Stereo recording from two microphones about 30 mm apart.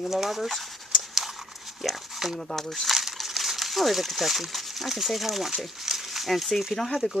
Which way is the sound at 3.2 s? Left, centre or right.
Centre.